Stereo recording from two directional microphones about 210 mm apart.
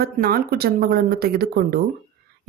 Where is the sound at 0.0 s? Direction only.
45° right (ahead or behind).